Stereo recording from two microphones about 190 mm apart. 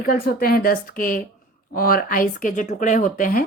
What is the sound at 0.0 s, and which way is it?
Speech, 50° left (ahead or behind).